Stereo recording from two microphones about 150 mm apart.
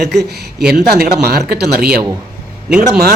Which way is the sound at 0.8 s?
90° right.